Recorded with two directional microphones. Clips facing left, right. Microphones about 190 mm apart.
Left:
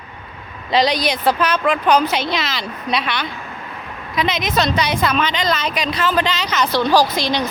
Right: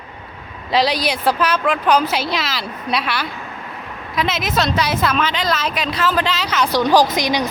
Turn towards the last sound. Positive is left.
turn(degrees=-15)  # may be behind; listen again after turning